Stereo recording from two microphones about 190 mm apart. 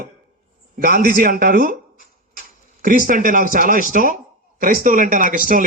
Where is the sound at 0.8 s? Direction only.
50° right (ahead or behind).